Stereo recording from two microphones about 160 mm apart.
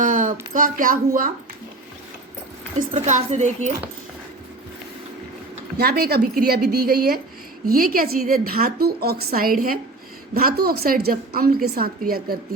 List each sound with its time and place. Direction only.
0.0 s speech: 55° right (ahead or behind)
2.9 s a woman's voice: 45° right (ahead or behind)
5.7 s a woman's voice: 75° right (ahead or behind)